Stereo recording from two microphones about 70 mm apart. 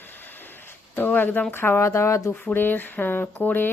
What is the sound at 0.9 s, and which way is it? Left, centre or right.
A woman's voice, left.